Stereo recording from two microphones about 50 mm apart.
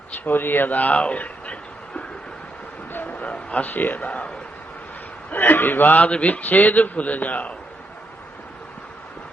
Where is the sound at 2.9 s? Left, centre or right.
Left.